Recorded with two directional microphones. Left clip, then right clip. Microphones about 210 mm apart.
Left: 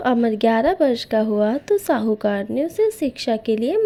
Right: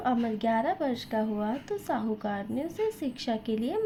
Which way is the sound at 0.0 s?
40° left (ahead or behind).